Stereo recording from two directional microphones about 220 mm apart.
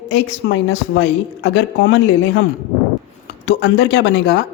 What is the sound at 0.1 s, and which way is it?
A woman's voice, 55° left (ahead or behind).